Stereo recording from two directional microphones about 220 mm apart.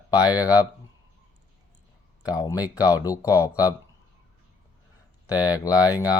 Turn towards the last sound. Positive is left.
turn(degrees=15)  # may be behind; listen again after turning